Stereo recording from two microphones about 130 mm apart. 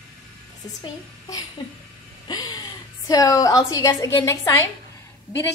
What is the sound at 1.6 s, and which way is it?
A woman's voice, 35° left (ahead or behind).